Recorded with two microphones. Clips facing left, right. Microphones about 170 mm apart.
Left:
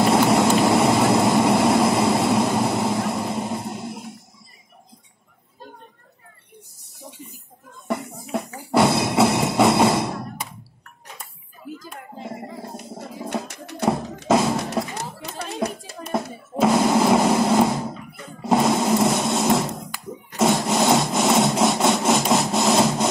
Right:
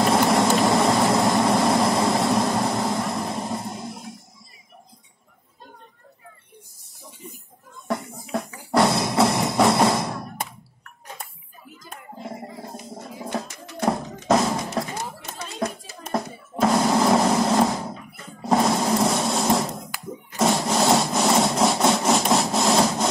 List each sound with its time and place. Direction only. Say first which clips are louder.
0.0 s vehicle: left 2 dB; 5° left (ahead or behind)
8.7 s music: left 2 dB; 5° left (ahead or behind)
13.8 s drum: left 1 dB; 5° left (ahead or behind)
14.8 s music: left 2 dB; 5° left (ahead or behind)
15.3 s music: left 5 dB; 65° left (ahead or behind)
16.1 s a sound: left 1 dB; 5° left (ahead or behind)
20.6 s sawing: left 1 dB; centre (ahead or behind)